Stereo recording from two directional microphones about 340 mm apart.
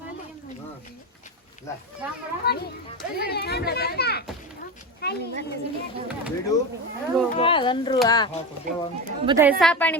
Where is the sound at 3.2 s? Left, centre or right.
Left.